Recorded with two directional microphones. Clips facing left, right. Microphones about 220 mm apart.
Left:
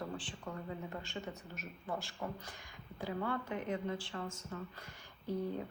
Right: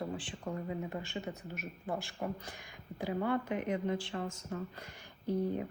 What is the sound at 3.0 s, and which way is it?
Speech, 15° right (ahead or behind).